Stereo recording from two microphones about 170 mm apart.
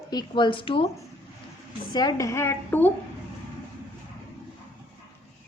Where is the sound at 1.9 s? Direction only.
25° left (ahead or behind).